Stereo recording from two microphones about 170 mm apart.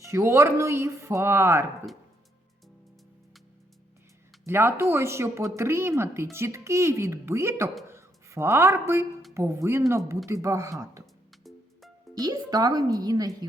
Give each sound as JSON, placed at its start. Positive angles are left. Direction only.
{"t": 0.0, "sound": "speech", "side_deg": -15}
{"t": 4.4, "sound": "speech", "side_deg": -15}
{"t": 12.1, "sound": "a woman's voice", "side_deg": -20}